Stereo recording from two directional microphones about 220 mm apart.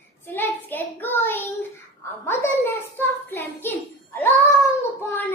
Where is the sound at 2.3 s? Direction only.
10° left (ahead or behind).